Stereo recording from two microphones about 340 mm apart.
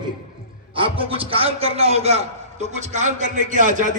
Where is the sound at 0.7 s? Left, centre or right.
Centre.